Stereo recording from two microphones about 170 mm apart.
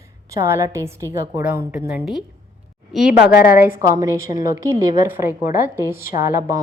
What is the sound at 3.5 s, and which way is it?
A woman's voice, 10° right (ahead or behind).